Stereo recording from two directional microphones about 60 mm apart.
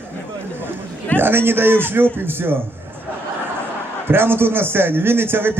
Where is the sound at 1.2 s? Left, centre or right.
Right.